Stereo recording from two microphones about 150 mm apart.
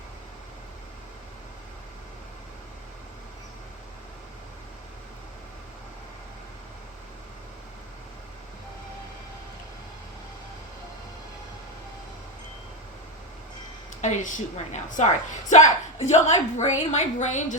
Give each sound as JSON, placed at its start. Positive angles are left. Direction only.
{"t": 14.0, "sound": "a woman's voice", "side_deg": 55}